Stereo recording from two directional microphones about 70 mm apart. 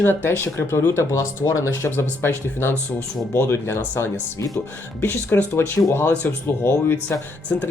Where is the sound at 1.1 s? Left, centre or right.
Left.